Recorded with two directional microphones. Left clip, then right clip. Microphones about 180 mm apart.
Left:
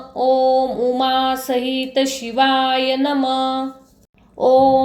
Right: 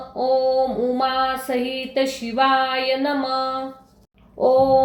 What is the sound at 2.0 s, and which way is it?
Speech, 30° left (ahead or behind).